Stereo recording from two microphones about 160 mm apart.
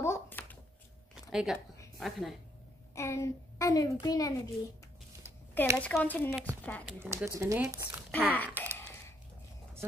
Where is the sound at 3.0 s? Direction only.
20° left (ahead or behind).